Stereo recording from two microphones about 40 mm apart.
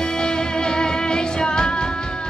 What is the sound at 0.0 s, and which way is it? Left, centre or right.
Music, left.